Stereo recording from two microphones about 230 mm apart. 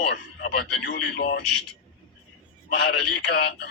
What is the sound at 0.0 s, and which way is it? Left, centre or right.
Speech, left.